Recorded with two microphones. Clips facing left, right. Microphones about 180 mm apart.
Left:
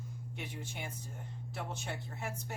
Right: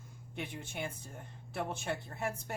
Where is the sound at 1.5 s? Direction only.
55° right (ahead or behind).